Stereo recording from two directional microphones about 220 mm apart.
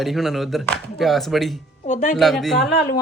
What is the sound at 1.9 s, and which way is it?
Speech, 30° left (ahead or behind).